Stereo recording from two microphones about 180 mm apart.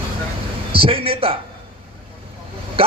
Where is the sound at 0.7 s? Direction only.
30° right (ahead or behind).